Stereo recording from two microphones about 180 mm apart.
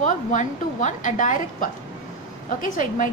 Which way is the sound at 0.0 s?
45° left (ahead or behind).